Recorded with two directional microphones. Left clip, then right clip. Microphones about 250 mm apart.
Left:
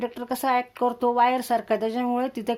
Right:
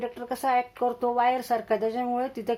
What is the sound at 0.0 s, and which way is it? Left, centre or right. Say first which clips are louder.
Speech: left 2 dB; left.